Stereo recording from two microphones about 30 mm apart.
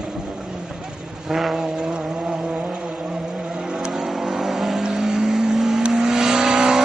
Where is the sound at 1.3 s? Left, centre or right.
Centre.